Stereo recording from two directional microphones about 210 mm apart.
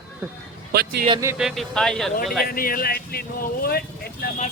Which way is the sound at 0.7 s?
50° right (ahead or behind).